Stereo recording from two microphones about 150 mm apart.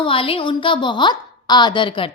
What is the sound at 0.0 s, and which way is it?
A woman's voice, 35° left (ahead or behind).